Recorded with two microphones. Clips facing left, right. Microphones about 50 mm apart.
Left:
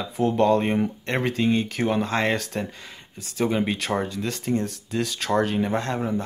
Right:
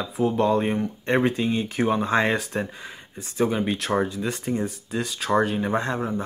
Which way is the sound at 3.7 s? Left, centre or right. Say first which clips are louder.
Right 2 dB; centre.